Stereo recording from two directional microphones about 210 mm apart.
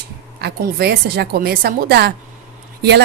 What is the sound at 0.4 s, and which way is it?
A woman's voice, 50° right (ahead or behind).